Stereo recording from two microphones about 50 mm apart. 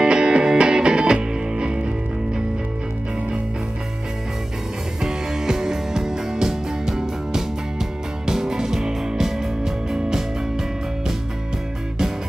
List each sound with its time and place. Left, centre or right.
0.0 s music: centre
5.0 s music: centre